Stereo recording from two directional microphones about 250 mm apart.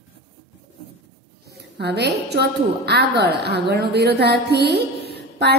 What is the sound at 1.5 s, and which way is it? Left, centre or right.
A woman's voice, right.